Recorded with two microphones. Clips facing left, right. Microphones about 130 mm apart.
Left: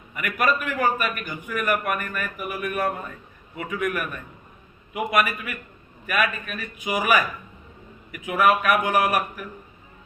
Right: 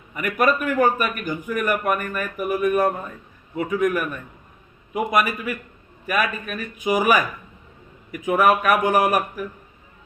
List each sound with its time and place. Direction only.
0.1 s a man's voice: 40° right (ahead or behind)